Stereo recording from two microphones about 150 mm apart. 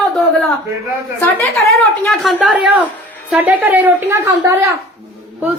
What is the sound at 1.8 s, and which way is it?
A woman's voice, centre (ahead or behind).